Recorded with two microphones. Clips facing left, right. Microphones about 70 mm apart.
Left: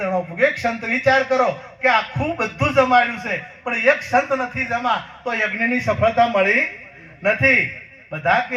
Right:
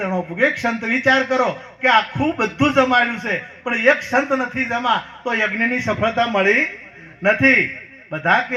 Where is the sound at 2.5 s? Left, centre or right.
Centre.